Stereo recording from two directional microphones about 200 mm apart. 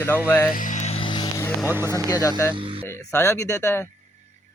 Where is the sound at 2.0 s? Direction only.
15° left (ahead or behind).